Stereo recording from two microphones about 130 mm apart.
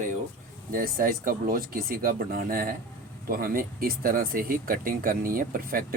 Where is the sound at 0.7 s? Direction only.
90° right.